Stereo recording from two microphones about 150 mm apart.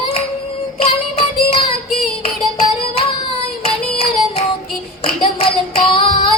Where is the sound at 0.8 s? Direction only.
40° left (ahead or behind).